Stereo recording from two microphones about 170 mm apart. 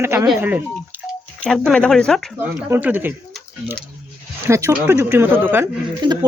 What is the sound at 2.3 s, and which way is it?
Speech, 10° right (ahead or behind).